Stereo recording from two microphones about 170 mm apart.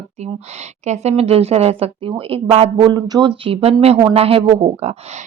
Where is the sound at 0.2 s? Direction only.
40° right (ahead or behind).